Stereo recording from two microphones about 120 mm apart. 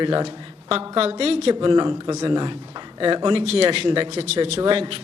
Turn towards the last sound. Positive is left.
turn(degrees=-50)  # may be behind; listen again after turning